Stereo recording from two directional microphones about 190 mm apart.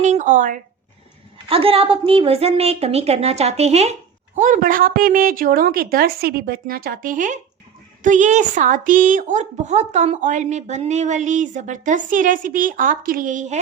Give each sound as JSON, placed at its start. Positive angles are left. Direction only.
{"t": 0.0, "sound": "speech", "side_deg": -40}
{"t": 1.5, "sound": "a woman's voice", "side_deg": -30}